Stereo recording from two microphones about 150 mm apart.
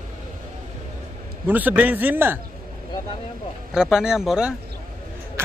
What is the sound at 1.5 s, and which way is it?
Speech, 10° right (ahead or behind).